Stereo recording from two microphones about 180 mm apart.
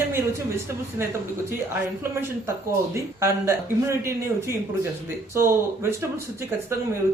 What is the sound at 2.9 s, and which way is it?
Speech, 15° right (ahead or behind).